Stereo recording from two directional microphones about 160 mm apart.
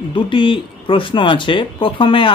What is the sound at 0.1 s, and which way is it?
Speech, 30° left (ahead or behind).